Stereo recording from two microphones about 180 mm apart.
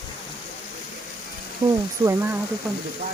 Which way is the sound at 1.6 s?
25° right (ahead or behind).